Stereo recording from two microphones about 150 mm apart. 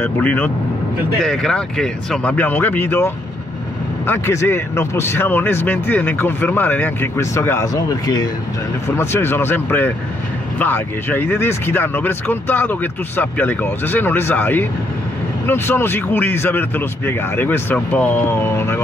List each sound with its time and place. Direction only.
0.0 s speech: 10° left (ahead or behind)